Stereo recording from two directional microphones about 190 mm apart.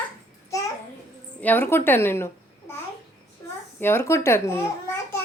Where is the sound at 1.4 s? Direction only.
10° left (ahead or behind).